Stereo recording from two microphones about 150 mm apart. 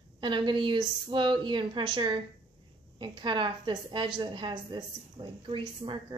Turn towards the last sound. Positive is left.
turn(degrees=-35)  # may be behind; listen again after turning